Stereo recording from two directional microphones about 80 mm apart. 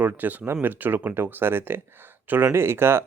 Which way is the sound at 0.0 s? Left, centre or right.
Right.